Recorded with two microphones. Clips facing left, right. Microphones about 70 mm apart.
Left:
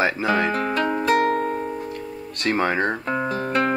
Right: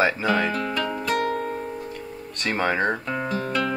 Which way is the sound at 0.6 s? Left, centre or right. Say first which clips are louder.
Left 4 dB; left.